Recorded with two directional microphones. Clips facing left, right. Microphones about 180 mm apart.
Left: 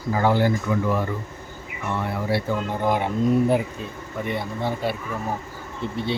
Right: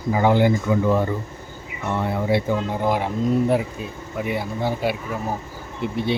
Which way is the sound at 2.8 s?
Centre (ahead or behind).